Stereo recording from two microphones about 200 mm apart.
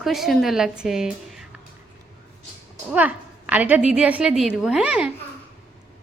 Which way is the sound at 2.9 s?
10° right (ahead or behind).